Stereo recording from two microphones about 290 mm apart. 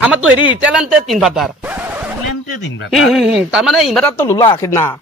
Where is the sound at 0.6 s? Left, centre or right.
Centre.